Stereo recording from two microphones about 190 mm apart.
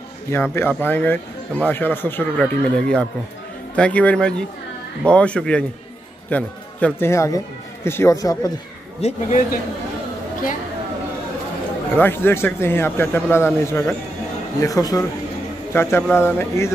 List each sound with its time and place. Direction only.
0.3 s speech: 10° left (ahead or behind)
9.0 s a man's voice: 40° left (ahead or behind)
12.0 s speech: 10° left (ahead or behind)